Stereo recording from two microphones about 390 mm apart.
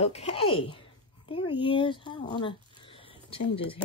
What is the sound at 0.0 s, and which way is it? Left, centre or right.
Speech, centre.